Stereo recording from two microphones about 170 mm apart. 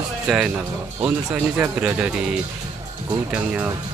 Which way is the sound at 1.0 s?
10° right (ahead or behind).